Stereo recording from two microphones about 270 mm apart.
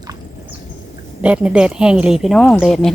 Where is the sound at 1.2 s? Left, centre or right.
Centre.